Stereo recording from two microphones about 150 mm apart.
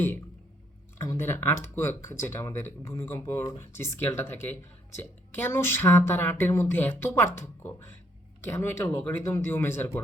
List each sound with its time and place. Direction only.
0.9 s speech: 15° left (ahead or behind)